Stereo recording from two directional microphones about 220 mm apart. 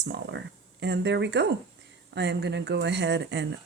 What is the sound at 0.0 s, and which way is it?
Speech, 50° right (ahead or behind).